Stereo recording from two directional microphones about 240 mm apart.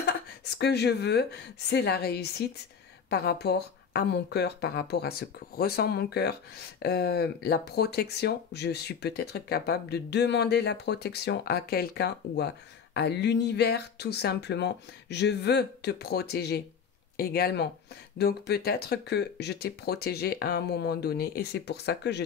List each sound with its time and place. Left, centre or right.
0.6 s speech: left